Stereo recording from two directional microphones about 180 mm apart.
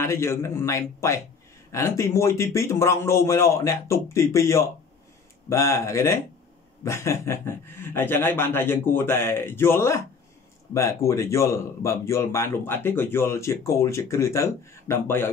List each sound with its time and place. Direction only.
0.0 s speech: 15° left (ahead or behind)